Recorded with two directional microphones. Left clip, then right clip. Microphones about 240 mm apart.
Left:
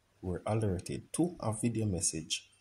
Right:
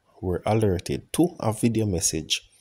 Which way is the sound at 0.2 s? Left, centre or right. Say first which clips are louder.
Right 11 dB; right.